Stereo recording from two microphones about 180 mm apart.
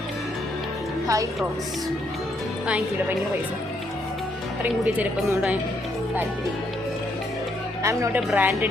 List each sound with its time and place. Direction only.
1.0 s speech: 20° right (ahead or behind)
2.6 s speech: 10° right (ahead or behind)
4.7 s speech: 5° right (ahead or behind)
7.8 s speech: 15° right (ahead or behind)